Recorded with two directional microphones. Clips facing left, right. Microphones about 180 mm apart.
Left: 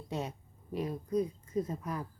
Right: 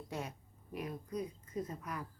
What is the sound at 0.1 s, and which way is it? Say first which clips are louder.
Speech: left 6 dB; 25° left (ahead or behind).